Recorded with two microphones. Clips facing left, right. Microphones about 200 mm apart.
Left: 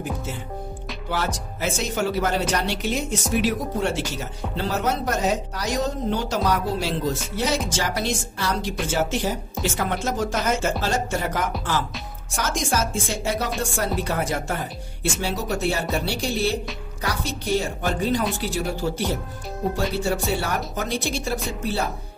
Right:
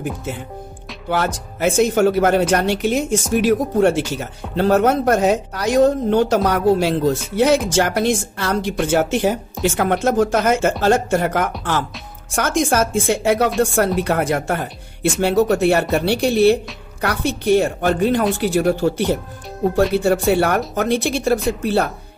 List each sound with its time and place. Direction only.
1.1 s speech: 55° right (ahead or behind)